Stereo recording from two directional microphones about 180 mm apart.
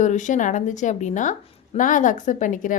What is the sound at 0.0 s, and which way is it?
A woman's voice, 45° left (ahead or behind).